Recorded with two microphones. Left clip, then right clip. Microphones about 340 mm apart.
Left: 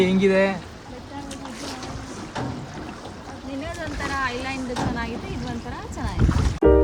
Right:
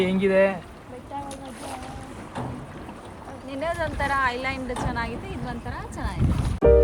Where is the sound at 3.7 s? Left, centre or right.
Centre.